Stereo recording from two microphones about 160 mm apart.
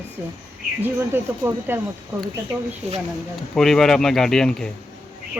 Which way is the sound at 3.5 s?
Centre (ahead or behind).